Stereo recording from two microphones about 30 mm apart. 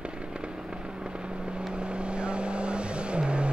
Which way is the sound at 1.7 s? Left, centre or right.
Right.